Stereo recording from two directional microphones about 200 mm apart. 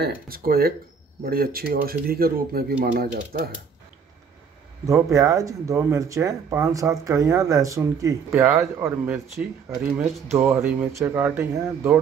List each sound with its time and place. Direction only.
0.0 s speech: 50° right (ahead or behind)
4.8 s speech: 15° right (ahead or behind)